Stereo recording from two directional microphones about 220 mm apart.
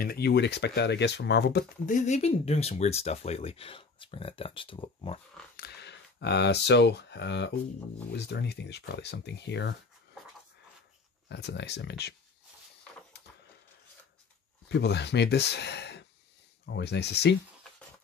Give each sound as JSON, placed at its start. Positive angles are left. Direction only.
{"t": 0.0, "sound": "speech", "side_deg": 45}
{"t": 5.6, "sound": "speech", "side_deg": 50}
{"t": 11.2, "sound": "speech", "side_deg": 50}
{"t": 14.7, "sound": "speech", "side_deg": 50}